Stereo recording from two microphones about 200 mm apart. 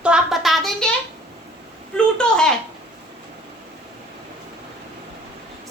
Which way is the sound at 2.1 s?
5° left (ahead or behind).